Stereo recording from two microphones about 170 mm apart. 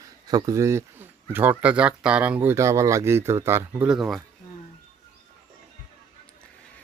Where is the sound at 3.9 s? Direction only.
Centre (ahead or behind).